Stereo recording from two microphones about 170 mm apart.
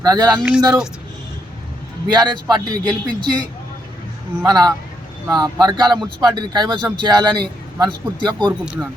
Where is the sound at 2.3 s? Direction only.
20° right (ahead or behind).